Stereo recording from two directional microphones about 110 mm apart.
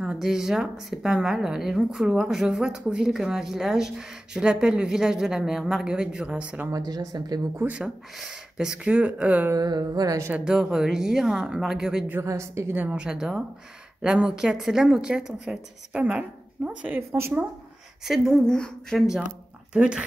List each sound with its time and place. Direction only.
0.0 s speech: 5° right (ahead or behind)
6.9 s music: 35° right (ahead or behind)
7.6 s speech: 10° right (ahead or behind)
9.5 s music: 40° right (ahead or behind)
10.3 s speech: 5° right (ahead or behind)
12.1 s speech: 25° right (ahead or behind)
18.0 s speech: 5° right (ahead or behind)
19.7 s speech: 10° right (ahead or behind)